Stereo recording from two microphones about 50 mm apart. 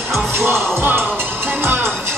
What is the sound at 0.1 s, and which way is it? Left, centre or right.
Music, right.